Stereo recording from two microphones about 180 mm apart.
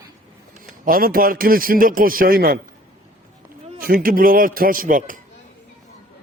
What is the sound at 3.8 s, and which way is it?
A man's voice, 55° right (ahead or behind).